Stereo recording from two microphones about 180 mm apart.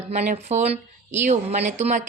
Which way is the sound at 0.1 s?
40° right (ahead or behind).